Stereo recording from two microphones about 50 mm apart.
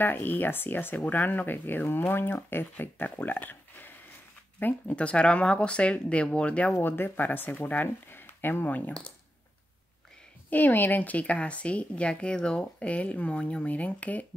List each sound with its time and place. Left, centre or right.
0.0 s speech: left
4.9 s speech: left
6.8 s speech: left
8.6 s speech: left
10.5 s speech: left